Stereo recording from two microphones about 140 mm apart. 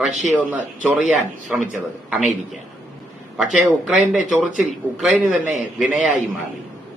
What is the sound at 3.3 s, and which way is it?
A man's voice, 5° right (ahead or behind).